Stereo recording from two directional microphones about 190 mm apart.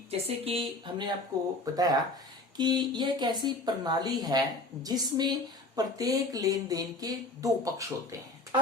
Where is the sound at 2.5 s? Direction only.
25° right (ahead or behind).